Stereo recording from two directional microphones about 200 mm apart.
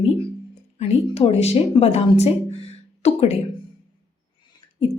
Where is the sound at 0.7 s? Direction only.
30° left (ahead or behind).